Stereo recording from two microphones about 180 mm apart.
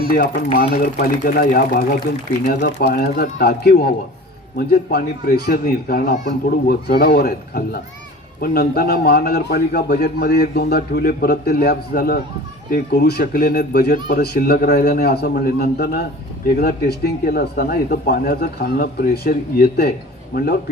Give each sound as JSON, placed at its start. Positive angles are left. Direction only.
{"t": 0.0, "sound": "a man's voice", "side_deg": 55}